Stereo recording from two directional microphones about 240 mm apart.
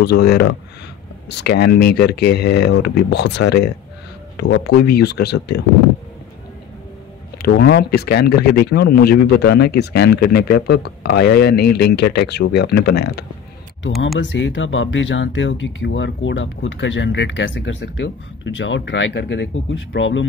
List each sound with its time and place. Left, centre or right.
0.0 s speech: left
7.4 s speech: left
14.2 s speech: left